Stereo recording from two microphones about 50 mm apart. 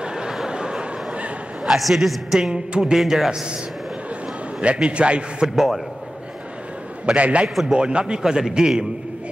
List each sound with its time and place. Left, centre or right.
0.0 s a sound: centre
1.6 s a woman's voice: centre
2.5 s a man's voice: centre
3.0 s a woman's voice: centre
4.6 s a man's voice: right
7.1 s a man's voice: right